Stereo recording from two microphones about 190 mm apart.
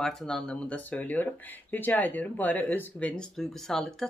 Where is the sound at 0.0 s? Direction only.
Centre (ahead or behind).